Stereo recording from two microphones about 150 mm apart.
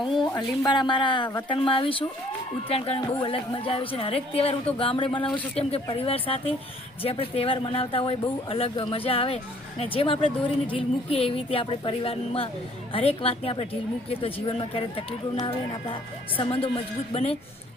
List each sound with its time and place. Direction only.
0.2 s speech: 30° left (ahead or behind)
16.4 s speech: 40° left (ahead or behind)